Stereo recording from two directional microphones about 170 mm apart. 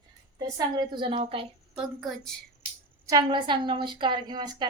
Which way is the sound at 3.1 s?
25° right (ahead or behind).